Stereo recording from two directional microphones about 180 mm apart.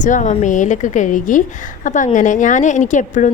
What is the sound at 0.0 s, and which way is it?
A woman's voice, 45° left (ahead or behind).